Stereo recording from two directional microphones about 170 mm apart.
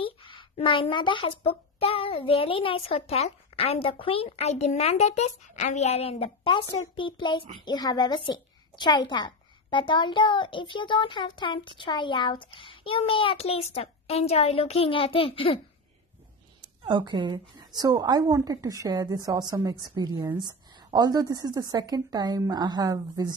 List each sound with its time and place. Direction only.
0.0 s a woman's voice: 30° left (ahead or behind)
16.8 s a woman's voice: 25° right (ahead or behind)